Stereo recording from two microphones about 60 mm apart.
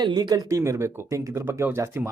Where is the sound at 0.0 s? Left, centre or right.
Right.